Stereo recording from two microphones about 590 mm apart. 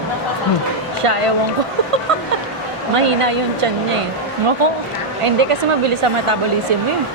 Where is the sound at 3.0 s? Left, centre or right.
Right.